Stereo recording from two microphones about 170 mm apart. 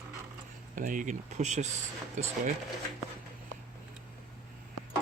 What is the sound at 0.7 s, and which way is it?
Speech, 50° right (ahead or behind).